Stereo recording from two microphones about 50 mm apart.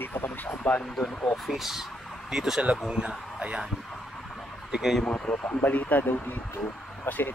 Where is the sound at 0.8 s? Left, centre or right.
Centre.